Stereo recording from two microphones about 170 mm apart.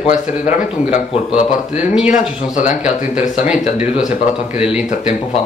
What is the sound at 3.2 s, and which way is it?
Speech, 45° left (ahead or behind).